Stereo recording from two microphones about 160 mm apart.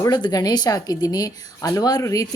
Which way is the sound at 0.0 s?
25° left (ahead or behind).